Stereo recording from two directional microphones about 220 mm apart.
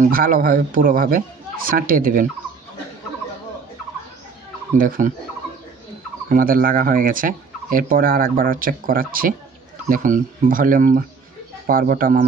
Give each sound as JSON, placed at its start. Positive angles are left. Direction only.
{"t": 0.0, "sound": "speech", "side_deg": -40}
{"t": 4.7, "sound": "speech", "side_deg": -40}
{"t": 6.2, "sound": "speech", "side_deg": -40}